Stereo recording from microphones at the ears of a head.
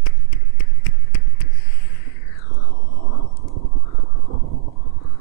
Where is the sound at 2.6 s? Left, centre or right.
Left.